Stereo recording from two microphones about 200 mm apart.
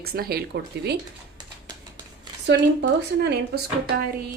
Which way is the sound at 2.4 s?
60° right (ahead or behind).